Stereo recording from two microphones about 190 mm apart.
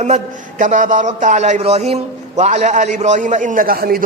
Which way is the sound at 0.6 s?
40° right (ahead or behind).